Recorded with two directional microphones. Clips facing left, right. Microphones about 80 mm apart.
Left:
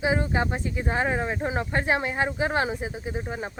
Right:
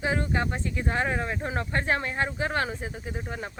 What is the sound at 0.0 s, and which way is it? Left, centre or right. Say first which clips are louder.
Speech: left 3 dB; centre.